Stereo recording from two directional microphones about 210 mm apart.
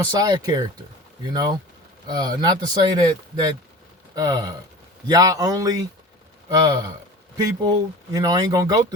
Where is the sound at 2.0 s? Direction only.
20° right (ahead or behind).